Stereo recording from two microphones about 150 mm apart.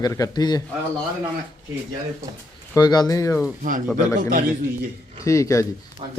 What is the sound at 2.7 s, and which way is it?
Speech, 30° left (ahead or behind).